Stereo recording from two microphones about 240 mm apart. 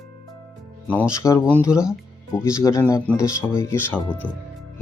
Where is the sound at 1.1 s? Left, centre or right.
Centre.